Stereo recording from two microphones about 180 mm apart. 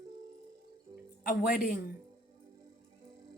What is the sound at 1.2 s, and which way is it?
Speech, 55° left (ahead or behind).